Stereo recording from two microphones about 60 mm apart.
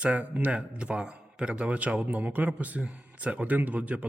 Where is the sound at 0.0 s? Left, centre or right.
Right.